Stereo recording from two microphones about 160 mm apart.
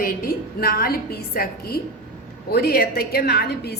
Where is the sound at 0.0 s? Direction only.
65° left (ahead or behind).